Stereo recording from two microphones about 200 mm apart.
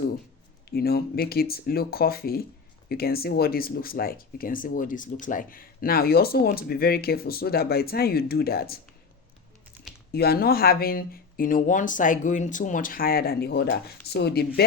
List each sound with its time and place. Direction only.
0.7 s speech: 50° left (ahead or behind)
10.1 s speech: 50° left (ahead or behind)